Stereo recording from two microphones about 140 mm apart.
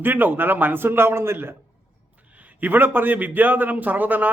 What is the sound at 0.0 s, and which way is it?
A man's voice, 15° right (ahead or behind).